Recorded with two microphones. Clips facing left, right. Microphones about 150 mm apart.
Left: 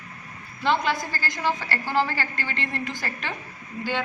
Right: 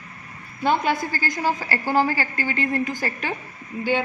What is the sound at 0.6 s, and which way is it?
A woman's voice, 50° right (ahead or behind).